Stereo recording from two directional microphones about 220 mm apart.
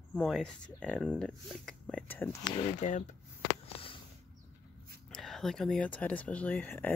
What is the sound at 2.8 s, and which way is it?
Speech, 35° left (ahead or behind).